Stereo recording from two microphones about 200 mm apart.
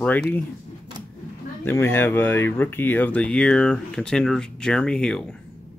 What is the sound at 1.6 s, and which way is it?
Speech, 10° left (ahead or behind).